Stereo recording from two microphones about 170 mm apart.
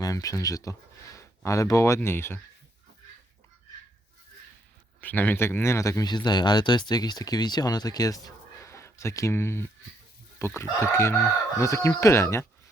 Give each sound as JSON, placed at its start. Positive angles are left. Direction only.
{"t": 0.0, "sound": "speech", "side_deg": 20}
{"t": 4.9, "sound": "speech", "side_deg": 10}